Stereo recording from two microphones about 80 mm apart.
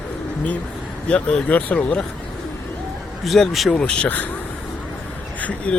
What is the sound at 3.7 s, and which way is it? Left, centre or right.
Speech, centre.